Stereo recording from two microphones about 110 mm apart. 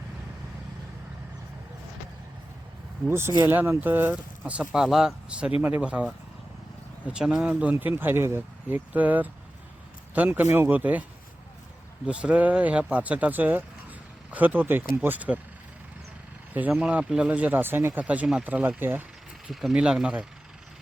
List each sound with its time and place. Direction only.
3.1 s speech: 25° right (ahead or behind); by 7.6 s 5° right (ahead or behind)
7.6 s speech: 15° right (ahead or behind)
12.0 s speech: 10° right (ahead or behind)
16.7 s speech: 10° right (ahead or behind)
19.5 s speech: 10° right (ahead or behind)